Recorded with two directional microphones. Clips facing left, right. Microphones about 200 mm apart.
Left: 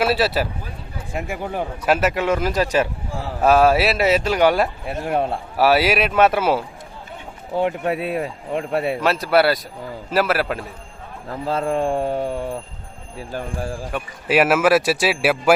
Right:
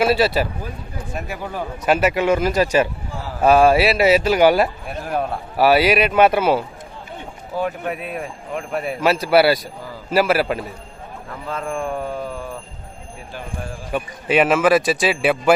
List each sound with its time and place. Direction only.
0.0 s speech: centre (ahead or behind)
1.1 s speech: 15° left (ahead or behind)
1.9 s speech: centre (ahead or behind)
4.9 s speech: 25° left (ahead or behind)
5.5 s speech: centre (ahead or behind)
7.5 s speech: 30° left (ahead or behind)
9.0 s speech: centre (ahead or behind)
11.3 s speech: 30° left (ahead or behind)
13.3 s speech: 40° left (ahead or behind)
13.9 s speech: 5° left (ahead or behind)